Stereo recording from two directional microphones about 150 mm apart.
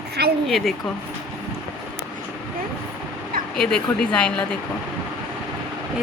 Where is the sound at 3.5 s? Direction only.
5° left (ahead or behind).